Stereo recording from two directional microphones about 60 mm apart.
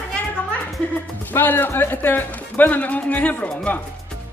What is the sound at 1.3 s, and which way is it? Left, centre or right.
Speech, left.